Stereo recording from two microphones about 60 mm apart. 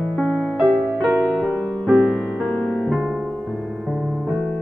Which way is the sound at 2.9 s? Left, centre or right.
Centre.